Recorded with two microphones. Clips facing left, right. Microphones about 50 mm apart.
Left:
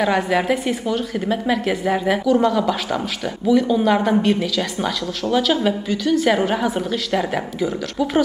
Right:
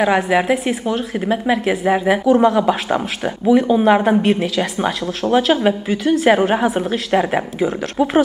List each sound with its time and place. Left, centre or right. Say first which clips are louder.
0.0 s a woman's voice: right 3 dB; centre